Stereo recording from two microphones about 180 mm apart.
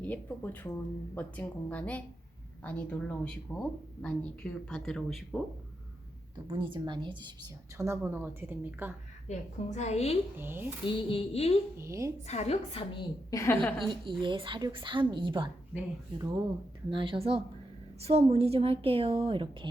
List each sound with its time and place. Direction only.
0.0 s speech: 10° left (ahead or behind)
6.5 s speech: 25° right (ahead or behind)
7.8 s a woman's voice: 15° right (ahead or behind)
9.2 s a woman's voice: 40° left (ahead or behind)
10.3 s a woman's voice: 10° right (ahead or behind)
10.8 s a woman's voice: 30° left (ahead or behind)
11.8 s a woman's voice: 15° right (ahead or behind)
12.3 s a woman's voice: 35° left (ahead or behind)
13.3 s speech: 15° left (ahead or behind)
13.8 s a woman's voice: 25° right (ahead or behind)